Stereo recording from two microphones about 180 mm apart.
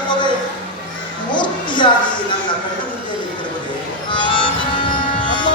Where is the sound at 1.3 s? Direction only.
25° left (ahead or behind).